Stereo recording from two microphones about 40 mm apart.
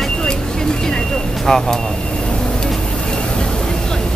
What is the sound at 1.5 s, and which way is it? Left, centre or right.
Speech, centre.